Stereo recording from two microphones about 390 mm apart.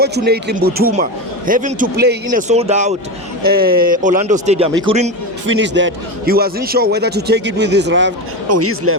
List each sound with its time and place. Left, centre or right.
0.0 s a man's voice: right
5.5 s a man's voice: right